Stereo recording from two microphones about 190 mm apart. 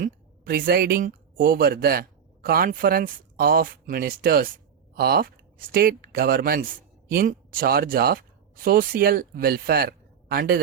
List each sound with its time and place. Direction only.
0.0 s speech: 50° right (ahead or behind)